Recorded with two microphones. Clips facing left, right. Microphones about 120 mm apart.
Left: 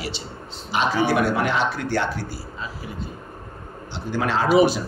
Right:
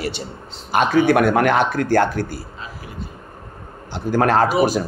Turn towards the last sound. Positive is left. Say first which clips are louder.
# right 1 dB
turn(degrees=-45)  # may be behind; listen again after turning